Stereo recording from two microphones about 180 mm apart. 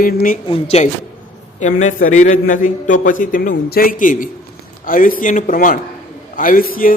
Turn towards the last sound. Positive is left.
turn(degrees=50)  # may be behind; listen again after turning